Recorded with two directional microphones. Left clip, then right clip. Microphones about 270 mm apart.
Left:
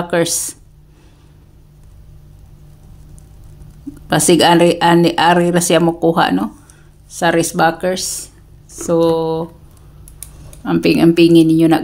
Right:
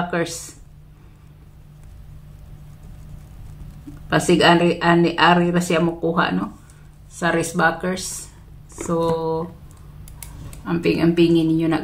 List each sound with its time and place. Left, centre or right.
0.1 s speech: left
4.1 s speech: left
10.6 s speech: left